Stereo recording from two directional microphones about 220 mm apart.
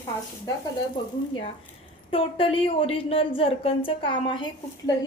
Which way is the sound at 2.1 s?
25° left (ahead or behind).